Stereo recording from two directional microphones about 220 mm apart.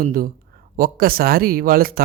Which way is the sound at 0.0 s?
40° right (ahead or behind).